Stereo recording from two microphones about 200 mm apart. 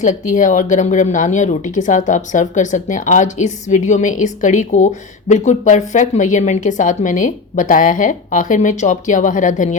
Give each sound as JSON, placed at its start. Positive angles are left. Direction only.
{"t": 0.0, "sound": "speech", "side_deg": 40}